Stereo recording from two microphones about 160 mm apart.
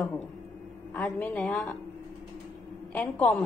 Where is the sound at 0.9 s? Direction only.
10° left (ahead or behind).